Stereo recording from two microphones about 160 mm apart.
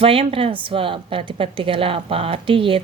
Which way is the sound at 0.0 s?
35° right (ahead or behind).